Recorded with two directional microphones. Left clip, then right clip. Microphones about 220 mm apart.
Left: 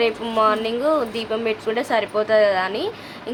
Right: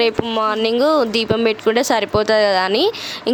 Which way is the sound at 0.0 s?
50° right (ahead or behind).